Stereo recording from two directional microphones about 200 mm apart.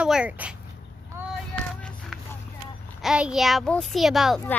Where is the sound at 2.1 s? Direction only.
Centre (ahead or behind).